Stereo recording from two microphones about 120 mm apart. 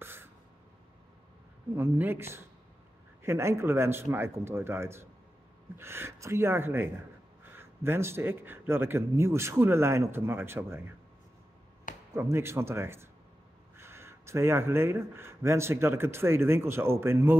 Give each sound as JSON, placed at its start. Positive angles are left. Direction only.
{"t": 0.0, "sound": "a sound", "side_deg": -20}
{"t": 1.8, "sound": "speech", "side_deg": -20}
{"t": 12.1, "sound": "speech", "side_deg": -20}